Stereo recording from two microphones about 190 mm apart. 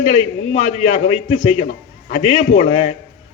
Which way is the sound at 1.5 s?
35° left (ahead or behind).